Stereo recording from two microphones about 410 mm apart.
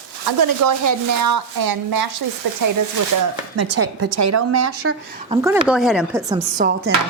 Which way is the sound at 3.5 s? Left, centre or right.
Right.